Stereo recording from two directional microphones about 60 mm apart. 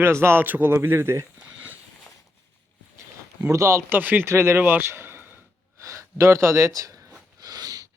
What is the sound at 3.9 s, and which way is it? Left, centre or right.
Speech, right.